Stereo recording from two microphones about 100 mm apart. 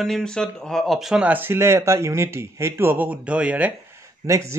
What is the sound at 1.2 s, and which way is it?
Speech, 20° right (ahead or behind).